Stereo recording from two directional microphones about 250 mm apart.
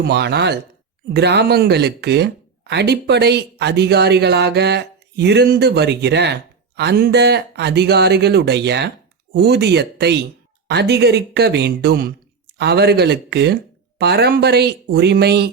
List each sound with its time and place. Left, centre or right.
0.0 s speech: right